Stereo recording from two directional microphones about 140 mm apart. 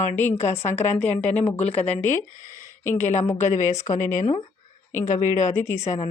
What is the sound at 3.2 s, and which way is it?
Speech, 15° left (ahead or behind).